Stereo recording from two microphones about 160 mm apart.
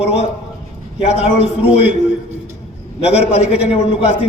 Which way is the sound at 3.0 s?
40° left (ahead or behind).